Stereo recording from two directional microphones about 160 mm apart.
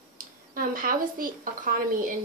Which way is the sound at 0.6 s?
60° right (ahead or behind).